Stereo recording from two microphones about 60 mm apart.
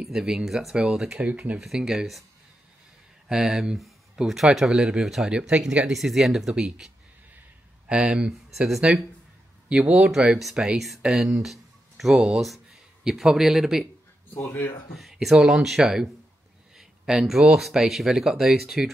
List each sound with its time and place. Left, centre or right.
0.0 s speech: centre
1.2 s speech: right
1.6 s speech: centre
3.3 s speech: centre
7.9 s speech: centre
8.3 s speech: centre
9.7 s speech: centre
15.0 s speech: centre